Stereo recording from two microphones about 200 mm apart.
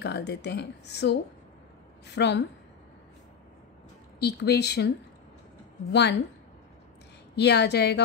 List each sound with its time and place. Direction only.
0.0 s speech: 60° left (ahead or behind)
4.2 s speech: 55° left (ahead or behind)
7.3 s speech: 55° left (ahead or behind)